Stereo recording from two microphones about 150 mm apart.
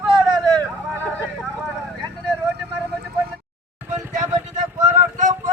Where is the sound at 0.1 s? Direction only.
25° right (ahead or behind).